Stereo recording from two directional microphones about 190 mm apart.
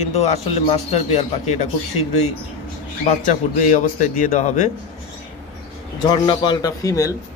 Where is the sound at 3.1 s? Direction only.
40° left (ahead or behind).